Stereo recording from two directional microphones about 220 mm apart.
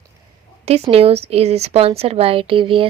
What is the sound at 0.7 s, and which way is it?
A woman's voice, 25° right (ahead or behind).